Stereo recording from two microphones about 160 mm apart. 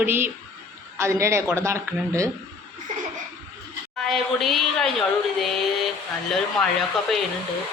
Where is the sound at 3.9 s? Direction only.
Centre (ahead or behind).